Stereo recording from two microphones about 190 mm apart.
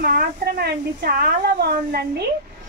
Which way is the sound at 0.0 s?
55° right (ahead or behind).